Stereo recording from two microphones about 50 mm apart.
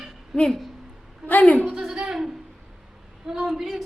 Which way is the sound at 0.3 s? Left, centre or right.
Centre.